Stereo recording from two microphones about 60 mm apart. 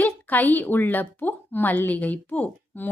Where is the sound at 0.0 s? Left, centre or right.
Left.